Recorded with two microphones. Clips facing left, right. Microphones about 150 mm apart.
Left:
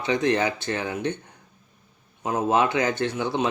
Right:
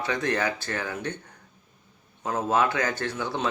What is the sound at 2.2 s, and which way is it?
Speech, 15° left (ahead or behind).